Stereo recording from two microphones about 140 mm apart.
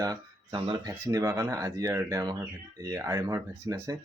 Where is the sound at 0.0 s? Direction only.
30° right (ahead or behind).